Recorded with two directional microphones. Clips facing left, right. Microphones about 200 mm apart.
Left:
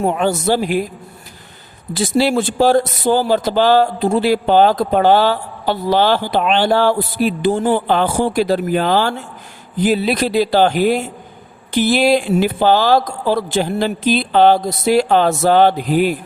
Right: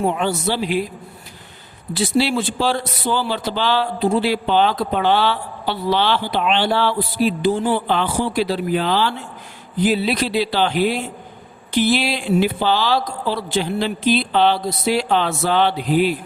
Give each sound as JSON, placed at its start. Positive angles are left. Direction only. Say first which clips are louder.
{"t": 0.0, "sound": "a man's voice", "louder": "left 3 dB", "side_deg": 45}
{"t": 1.9, "sound": "a man's voice", "louder": "left 3 dB", "side_deg": 45}